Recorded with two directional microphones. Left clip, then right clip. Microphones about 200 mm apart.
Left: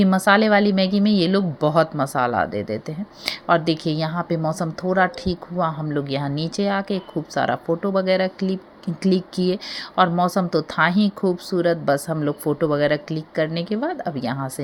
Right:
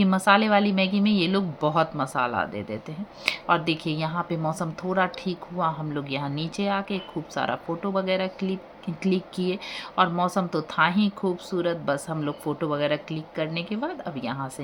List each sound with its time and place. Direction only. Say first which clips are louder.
0.0 s speech: left 4 dB; 25° left (ahead or behind)